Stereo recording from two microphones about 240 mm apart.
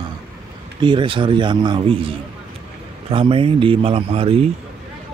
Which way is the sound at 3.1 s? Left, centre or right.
Right.